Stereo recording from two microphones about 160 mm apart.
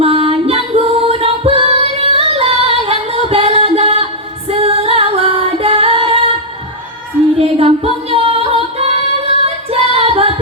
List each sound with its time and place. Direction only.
0.0 s music: 35° right (ahead or behind)
7.3 s music: 40° right (ahead or behind)